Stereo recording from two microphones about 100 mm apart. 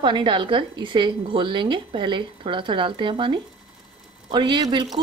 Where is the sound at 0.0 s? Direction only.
55° right (ahead or behind).